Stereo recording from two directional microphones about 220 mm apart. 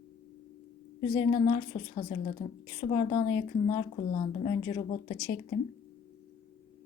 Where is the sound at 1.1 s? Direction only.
35° left (ahead or behind).